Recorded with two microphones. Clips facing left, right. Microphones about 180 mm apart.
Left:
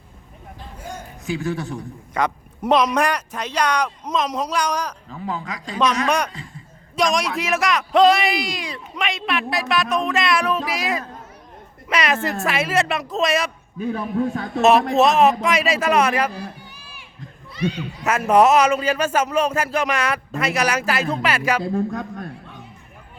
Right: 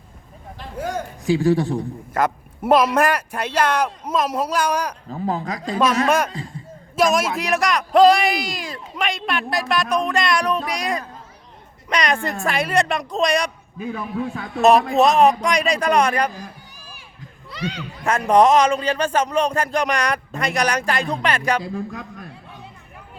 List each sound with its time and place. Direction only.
0.6 s a sound: 90° right
1.2 s speech: 30° right (ahead or behind)
2.1 s speech: 5° right (ahead or behind)
5.0 s speech: 40° right (ahead or behind)
6.1 s a man's voice: 5° right (ahead or behind)
13.9 s a man's voice: 40° left (ahead or behind)
14.6 s a man's voice: centre (ahead or behind)
18.1 s a man's voice: 5° left (ahead or behind)